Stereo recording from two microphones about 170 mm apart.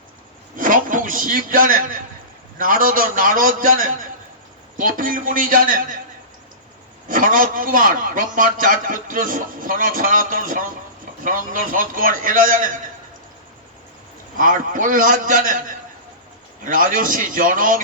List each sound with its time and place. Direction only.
0.5 s a man's voice: 55° right (ahead or behind)
7.1 s a man's voice: 55° right (ahead or behind)
14.3 s a man's voice: 50° right (ahead or behind)